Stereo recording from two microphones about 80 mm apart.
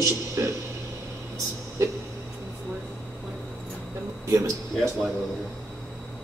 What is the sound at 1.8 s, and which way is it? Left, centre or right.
Speech, right.